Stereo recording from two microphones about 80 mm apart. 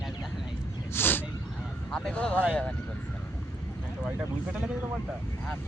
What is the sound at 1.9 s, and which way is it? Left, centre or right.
Speech, centre.